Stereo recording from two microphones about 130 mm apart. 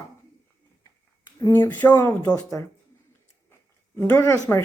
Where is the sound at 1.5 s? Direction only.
20° left (ahead or behind).